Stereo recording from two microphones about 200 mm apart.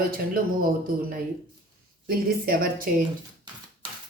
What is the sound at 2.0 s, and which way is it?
Speech, 45° right (ahead or behind).